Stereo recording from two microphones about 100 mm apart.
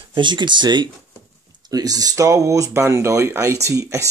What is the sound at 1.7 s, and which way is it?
Speech, 40° right (ahead or behind).